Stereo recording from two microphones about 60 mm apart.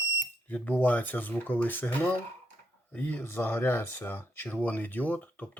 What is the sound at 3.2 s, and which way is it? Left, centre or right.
Speech, left.